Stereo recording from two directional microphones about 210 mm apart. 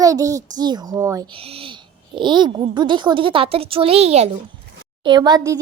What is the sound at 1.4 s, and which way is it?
A woman's voice, 25° right (ahead or behind).